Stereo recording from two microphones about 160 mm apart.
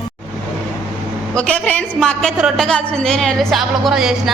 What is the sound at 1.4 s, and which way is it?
A woman's voice, 10° left (ahead or behind).